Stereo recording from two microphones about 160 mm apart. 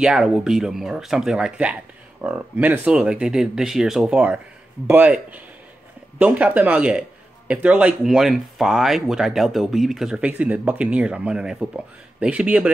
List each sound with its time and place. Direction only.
0.0 s a man's voice: 5° right (ahead or behind)